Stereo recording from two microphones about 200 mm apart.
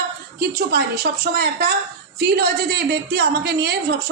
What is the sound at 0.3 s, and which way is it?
A woman's voice, 55° right (ahead or behind).